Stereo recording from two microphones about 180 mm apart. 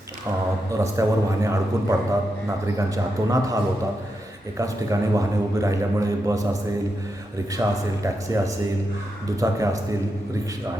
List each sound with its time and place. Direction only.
0.8 s a man's voice: 15° right (ahead or behind)
7.6 s a man's voice: 15° right (ahead or behind)